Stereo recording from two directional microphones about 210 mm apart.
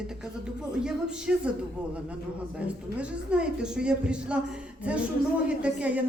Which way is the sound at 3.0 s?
5° right (ahead or behind).